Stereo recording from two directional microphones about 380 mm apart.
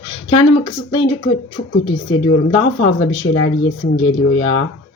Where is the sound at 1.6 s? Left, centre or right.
Left.